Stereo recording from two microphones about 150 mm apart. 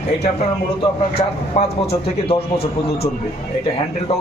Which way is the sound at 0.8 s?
40° left (ahead or behind).